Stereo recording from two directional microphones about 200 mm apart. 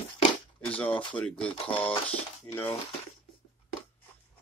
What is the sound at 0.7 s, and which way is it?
Speech, 5° left (ahead or behind).